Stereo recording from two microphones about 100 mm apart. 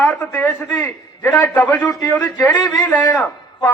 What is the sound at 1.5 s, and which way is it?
Speech, 15° left (ahead or behind).